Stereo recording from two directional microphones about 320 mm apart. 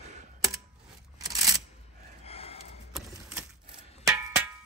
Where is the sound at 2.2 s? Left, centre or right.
Centre.